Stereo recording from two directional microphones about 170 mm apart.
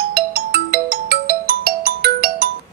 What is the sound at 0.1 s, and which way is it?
Ringtone, 60° right (ahead or behind).